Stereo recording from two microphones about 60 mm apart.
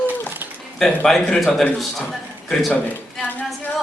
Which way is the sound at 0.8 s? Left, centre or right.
Centre.